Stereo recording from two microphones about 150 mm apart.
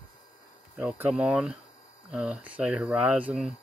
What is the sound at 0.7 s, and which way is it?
Speech, 10° right (ahead or behind).